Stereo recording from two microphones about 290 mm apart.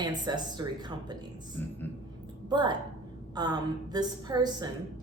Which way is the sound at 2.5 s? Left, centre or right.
Centre.